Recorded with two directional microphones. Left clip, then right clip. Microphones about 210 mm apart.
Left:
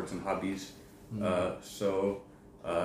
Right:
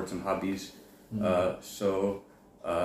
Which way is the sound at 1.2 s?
5° right (ahead or behind).